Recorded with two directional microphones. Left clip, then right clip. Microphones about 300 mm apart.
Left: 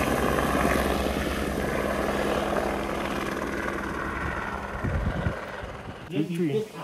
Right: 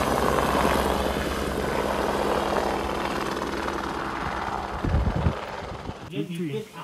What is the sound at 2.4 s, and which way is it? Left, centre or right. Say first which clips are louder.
Vehicle: right 2 dB; right.